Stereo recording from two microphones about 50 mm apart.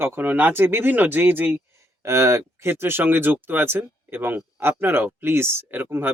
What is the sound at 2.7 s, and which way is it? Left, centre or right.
Speech, right.